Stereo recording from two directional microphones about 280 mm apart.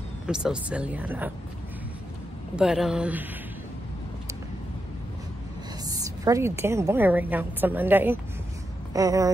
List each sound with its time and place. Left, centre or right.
0.3 s speech: centre
2.5 s speech: centre
5.9 s a woman's voice: centre